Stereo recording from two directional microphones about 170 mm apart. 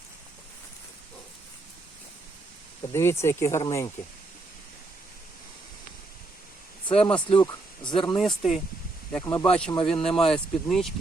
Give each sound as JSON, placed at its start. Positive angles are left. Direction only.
{"t": 2.9, "sound": "speech", "side_deg": 15}
{"t": 6.8, "sound": "speech", "side_deg": 35}
{"t": 8.4, "sound": "speech", "side_deg": 0}
{"t": 9.2, "sound": "speech", "side_deg": 20}
{"t": 9.5, "sound": "speech", "side_deg": 5}